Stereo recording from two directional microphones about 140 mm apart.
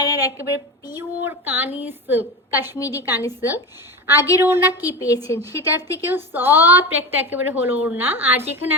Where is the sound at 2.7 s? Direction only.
25° left (ahead or behind).